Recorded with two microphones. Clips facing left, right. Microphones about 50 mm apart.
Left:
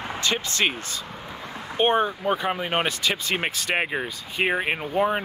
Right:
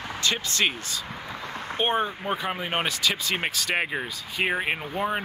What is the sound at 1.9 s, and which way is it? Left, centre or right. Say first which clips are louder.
Speech: left 4 dB; left.